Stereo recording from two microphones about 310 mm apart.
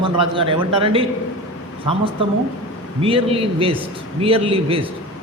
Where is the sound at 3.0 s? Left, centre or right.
Centre.